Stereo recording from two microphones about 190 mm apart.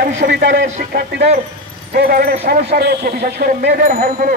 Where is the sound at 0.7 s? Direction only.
50° right (ahead or behind).